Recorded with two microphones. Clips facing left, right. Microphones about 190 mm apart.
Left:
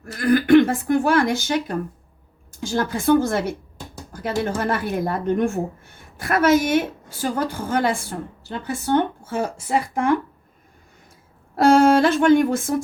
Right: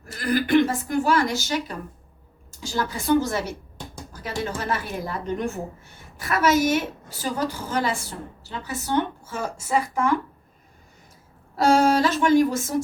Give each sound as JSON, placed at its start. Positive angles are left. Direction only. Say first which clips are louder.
{"t": 0.0, "sound": "a woman's voice", "louder": "left 5 dB", "side_deg": 55}
{"t": 11.5, "sound": "speech", "louder": "left 4 dB", "side_deg": 55}